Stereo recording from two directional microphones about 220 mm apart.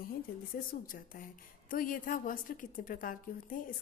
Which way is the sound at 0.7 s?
40° left (ahead or behind).